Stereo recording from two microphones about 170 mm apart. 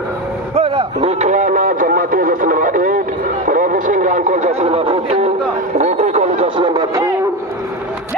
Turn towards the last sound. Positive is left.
turn(degrees=-15)  # may be behind; listen again after turning